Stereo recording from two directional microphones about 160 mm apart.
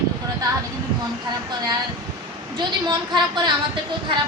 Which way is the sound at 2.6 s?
30° right (ahead or behind).